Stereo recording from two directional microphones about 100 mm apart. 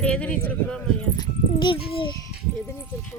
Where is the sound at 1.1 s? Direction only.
50° left (ahead or behind).